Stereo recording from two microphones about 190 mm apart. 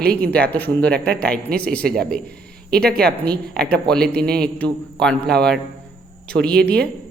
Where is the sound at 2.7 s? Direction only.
55° right (ahead or behind).